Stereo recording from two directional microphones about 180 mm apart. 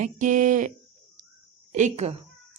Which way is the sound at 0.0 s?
45° right (ahead or behind).